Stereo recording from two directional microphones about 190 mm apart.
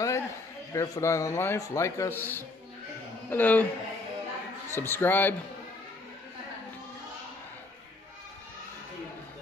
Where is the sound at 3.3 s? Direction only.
10° left (ahead or behind).